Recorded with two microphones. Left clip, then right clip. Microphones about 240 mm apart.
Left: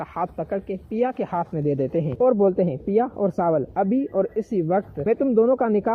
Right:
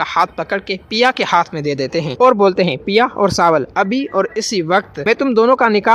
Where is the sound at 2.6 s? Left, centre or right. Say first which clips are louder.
Right 7 dB; right.